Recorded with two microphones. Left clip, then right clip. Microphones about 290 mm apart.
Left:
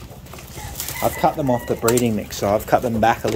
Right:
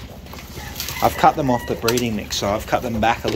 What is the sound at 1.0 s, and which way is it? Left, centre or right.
Speech, centre.